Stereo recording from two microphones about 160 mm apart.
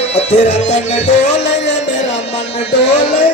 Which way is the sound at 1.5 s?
90° left.